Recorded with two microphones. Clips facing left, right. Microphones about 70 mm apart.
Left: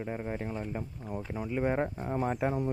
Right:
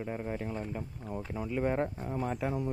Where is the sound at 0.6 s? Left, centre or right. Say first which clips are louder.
Left 1 dB; left.